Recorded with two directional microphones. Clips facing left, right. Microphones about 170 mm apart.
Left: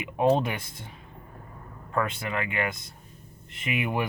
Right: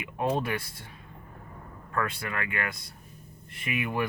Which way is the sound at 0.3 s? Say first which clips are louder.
Left 5 dB; 25° left (ahead or behind).